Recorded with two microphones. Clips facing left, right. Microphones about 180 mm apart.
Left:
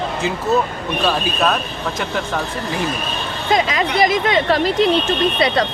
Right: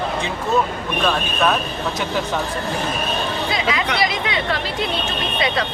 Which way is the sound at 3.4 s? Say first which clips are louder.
Left 8 dB; 45° left (ahead or behind).